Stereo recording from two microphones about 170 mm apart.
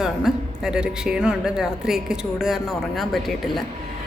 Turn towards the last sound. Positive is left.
turn(degrees=0)  # may be behind; listen again after turning